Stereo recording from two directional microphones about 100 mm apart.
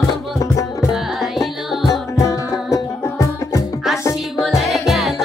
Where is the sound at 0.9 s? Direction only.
Centre (ahead or behind).